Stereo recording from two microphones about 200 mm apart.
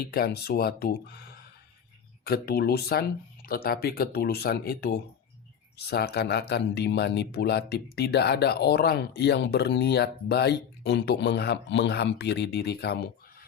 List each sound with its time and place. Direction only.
0.0 s speech: 50° left (ahead or behind)